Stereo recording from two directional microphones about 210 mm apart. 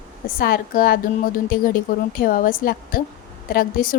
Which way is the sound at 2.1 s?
45° left (ahead or behind).